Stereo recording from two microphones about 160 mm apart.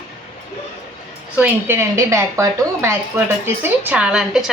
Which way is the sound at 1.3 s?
10° right (ahead or behind).